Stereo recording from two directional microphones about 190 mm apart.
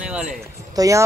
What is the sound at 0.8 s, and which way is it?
Speech, 15° right (ahead or behind).